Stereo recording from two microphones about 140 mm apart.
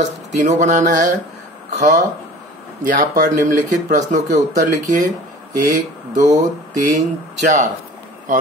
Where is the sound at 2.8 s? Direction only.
70° right (ahead or behind).